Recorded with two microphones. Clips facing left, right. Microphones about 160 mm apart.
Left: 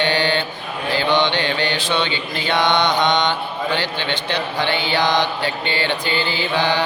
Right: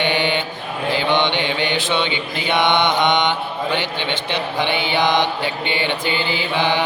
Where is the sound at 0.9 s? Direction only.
20° right (ahead or behind).